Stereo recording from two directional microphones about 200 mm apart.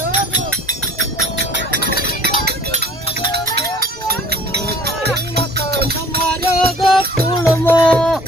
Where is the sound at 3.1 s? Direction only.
30° left (ahead or behind).